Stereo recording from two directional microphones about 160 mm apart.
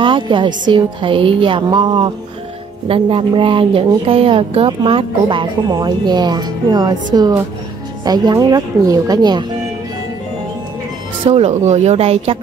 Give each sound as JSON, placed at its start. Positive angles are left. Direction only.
{"t": 0.0, "sound": "a woman's voice", "side_deg": -30}
{"t": 11.2, "sound": "a woman's voice", "side_deg": -40}